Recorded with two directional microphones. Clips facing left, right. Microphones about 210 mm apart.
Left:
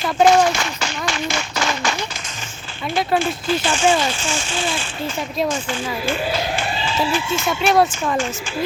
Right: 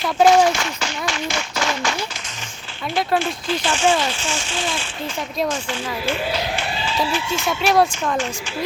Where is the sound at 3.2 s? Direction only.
5° left (ahead or behind).